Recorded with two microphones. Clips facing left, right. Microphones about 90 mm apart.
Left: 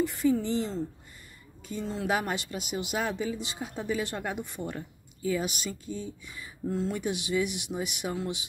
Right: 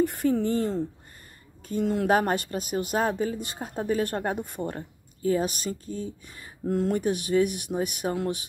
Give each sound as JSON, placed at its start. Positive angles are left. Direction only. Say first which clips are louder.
{"t": 0.0, "sound": "speech", "louder": "right 2 dB", "side_deg": -50}